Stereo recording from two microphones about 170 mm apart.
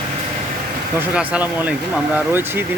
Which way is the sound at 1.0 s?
10° right (ahead or behind).